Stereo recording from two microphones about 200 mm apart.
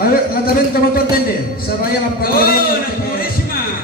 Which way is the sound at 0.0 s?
50° left (ahead or behind).